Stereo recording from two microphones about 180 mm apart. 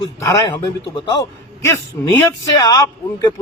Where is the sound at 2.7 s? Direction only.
20° left (ahead or behind).